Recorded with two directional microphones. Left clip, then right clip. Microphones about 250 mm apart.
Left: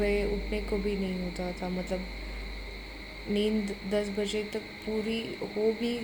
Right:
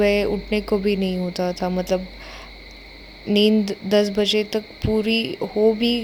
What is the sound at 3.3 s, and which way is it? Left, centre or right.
A woman's voice, right.